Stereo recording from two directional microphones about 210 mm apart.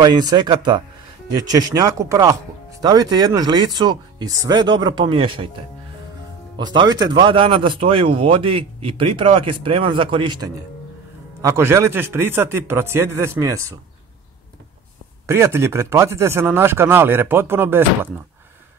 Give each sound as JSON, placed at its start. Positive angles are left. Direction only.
{"t": 0.0, "sound": "speech", "side_deg": -20}
{"t": 6.5, "sound": "speech", "side_deg": -20}
{"t": 15.2, "sound": "speech", "side_deg": -10}